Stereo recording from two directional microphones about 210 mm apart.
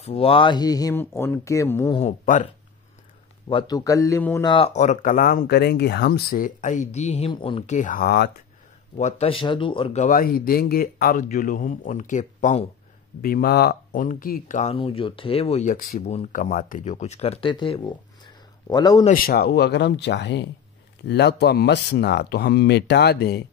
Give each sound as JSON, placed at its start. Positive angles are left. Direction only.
{"t": 0.0, "sound": "speech", "side_deg": 25}
{"t": 2.0, "sound": "speech", "side_deg": 35}
{"t": 3.4, "sound": "speech", "side_deg": 20}
{"t": 8.9, "sound": "speech", "side_deg": 30}
{"t": 13.2, "sound": "speech", "side_deg": 45}
{"t": 19.0, "sound": "speech", "side_deg": 45}